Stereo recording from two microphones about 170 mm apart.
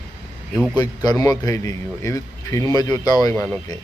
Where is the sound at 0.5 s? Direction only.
5° right (ahead or behind).